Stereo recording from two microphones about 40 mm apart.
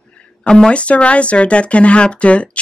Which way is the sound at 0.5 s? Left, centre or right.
Centre.